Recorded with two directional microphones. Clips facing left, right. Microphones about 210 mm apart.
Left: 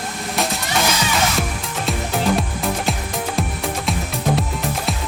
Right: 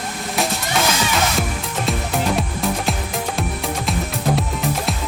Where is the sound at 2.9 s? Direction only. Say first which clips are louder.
Even; centre (ahead or behind).